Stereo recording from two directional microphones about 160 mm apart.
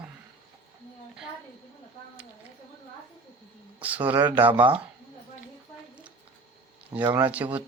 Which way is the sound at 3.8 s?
10° right (ahead or behind).